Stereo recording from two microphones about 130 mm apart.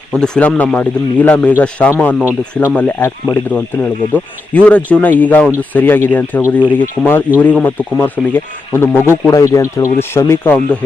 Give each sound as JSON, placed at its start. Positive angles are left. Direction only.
{"t": 0.1, "sound": "a man's voice", "side_deg": 10}